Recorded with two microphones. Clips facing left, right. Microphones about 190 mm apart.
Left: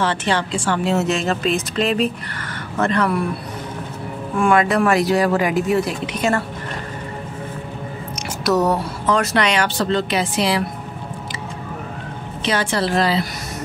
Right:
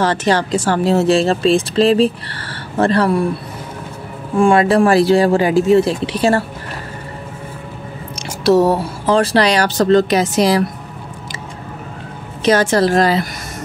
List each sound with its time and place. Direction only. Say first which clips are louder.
0.0 s speech: right 5 dB; 40° right (ahead or behind)
4.4 s speech: right 5 dB; 30° right (ahead or behind)
8.5 s speech: right 6 dB; 30° right (ahead or behind)
12.4 s a woman's voice: right 7 dB; 45° right (ahead or behind)